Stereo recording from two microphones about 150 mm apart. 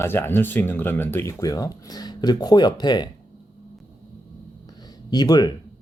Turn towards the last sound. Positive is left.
turn(degrees=25)  # may be behind; listen again after turning